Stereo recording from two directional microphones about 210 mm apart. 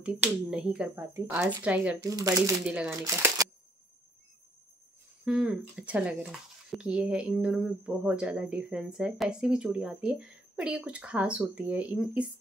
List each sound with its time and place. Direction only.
0.0 s speech: 5° right (ahead or behind)
2.0 s speech: 15° right (ahead or behind)
2.6 s speech: 5° right (ahead or behind)
3.0 s speech: 15° right (ahead or behind)
5.2 s speech: 5° right (ahead or behind)